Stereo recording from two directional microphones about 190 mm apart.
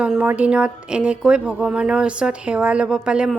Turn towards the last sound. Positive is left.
turn(degrees=-5)  # may be behind; listen again after turning